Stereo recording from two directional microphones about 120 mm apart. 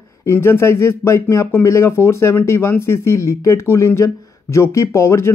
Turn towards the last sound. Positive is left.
turn(degrees=20)  # may be behind; listen again after turning